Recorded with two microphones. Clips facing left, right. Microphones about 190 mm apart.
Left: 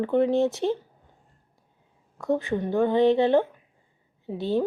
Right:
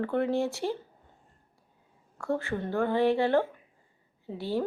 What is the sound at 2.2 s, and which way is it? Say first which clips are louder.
A woman's voice: left 5 dB; 15° left (ahead or behind).